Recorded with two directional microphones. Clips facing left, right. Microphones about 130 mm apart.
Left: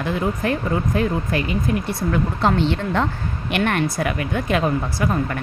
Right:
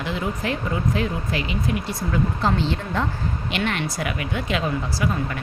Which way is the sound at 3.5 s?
55° left (ahead or behind).